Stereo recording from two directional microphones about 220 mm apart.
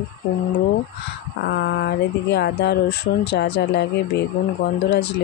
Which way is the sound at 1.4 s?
50° left (ahead or behind).